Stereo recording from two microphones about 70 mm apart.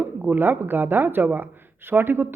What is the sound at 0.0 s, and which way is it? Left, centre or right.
Speech, right.